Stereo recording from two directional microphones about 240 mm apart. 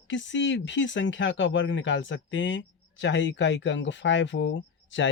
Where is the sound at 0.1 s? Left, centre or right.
Left.